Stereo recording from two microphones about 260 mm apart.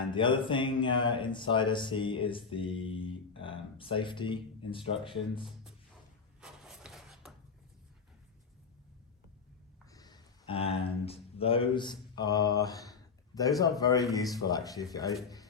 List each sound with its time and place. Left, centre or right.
0.1 s speech: centre
6.4 s a sound: centre
9.9 s speech: centre